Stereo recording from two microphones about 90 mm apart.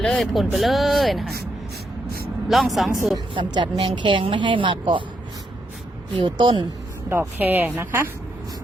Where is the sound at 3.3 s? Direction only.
60° right (ahead or behind).